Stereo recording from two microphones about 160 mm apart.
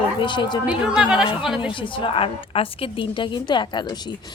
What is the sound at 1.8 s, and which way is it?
Speech, 30° left (ahead or behind).